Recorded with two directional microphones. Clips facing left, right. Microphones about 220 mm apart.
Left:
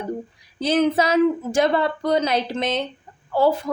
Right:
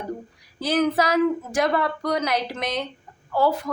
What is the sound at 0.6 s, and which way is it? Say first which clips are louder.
A woman's voice: left 2 dB; 25° left (ahead or behind).